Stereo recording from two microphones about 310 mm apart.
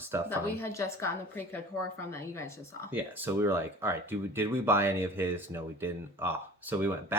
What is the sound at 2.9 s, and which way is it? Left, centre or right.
Speech, centre.